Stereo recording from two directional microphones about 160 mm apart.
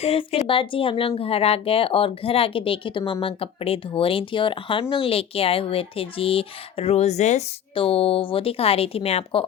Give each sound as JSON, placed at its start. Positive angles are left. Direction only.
{"t": 0.0, "sound": "speech", "side_deg": 40}